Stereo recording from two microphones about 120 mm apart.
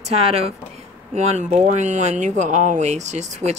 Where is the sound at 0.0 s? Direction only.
60° right (ahead or behind).